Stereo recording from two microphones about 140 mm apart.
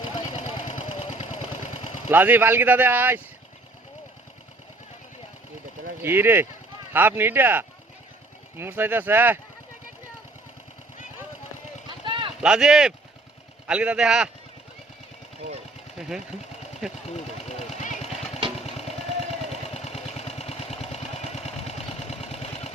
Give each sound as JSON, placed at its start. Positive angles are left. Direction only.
{"t": 0.0, "sound": "vehicle", "side_deg": 35}
{"t": 0.7, "sound": "a sound", "side_deg": 55}
{"t": 2.0, "sound": "speech", "side_deg": -15}
{"t": 6.0, "sound": "speech", "side_deg": -15}
{"t": 11.9, "sound": "a sound", "side_deg": -35}
{"t": 12.4, "sound": "speech", "side_deg": -5}
{"t": 16.0, "sound": "engine", "side_deg": -5}
{"t": 17.1, "sound": "vehicle", "side_deg": 50}
{"t": 18.6, "sound": "a sound", "side_deg": 45}
{"t": 19.7, "sound": "vehicle", "side_deg": 45}